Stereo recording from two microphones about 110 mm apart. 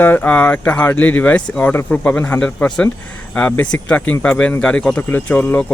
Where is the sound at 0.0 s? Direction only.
15° left (ahead or behind).